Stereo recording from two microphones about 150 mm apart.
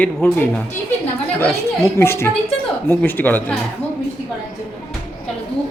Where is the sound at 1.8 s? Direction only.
15° left (ahead or behind).